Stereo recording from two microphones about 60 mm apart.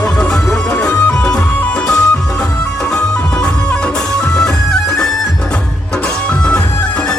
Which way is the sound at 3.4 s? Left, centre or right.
Centre.